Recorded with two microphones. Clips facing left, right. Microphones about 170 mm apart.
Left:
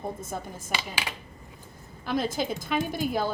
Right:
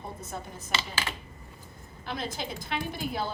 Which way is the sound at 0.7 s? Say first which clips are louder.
Even; 15° left (ahead or behind).